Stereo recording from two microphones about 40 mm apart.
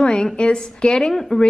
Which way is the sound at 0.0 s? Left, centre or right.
Left.